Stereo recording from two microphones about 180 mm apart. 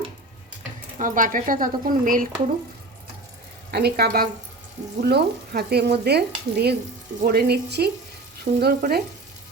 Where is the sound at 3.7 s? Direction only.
60° right (ahead or behind).